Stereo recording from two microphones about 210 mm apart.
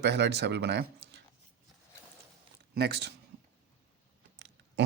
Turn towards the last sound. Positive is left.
turn(degrees=-55)  # may be behind; listen again after turning